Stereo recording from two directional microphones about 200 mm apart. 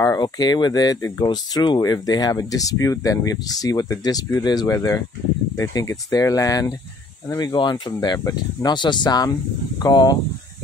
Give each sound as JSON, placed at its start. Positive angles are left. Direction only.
{"t": 0.0, "sound": "speech", "side_deg": 15}